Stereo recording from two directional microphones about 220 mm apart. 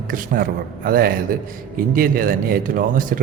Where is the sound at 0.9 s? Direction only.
40° right (ahead or behind).